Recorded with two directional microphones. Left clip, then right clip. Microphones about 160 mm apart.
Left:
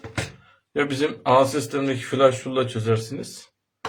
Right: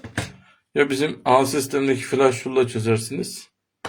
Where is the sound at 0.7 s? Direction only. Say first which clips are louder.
Right 3 dB; 30° right (ahead or behind).